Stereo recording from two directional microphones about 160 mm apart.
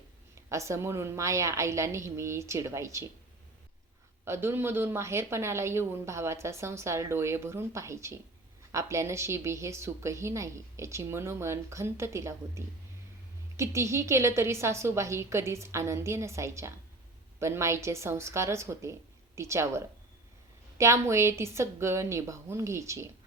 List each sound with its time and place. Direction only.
0.3 s a woman's voice: 20° right (ahead or behind)
4.3 s a woman's voice: 15° right (ahead or behind)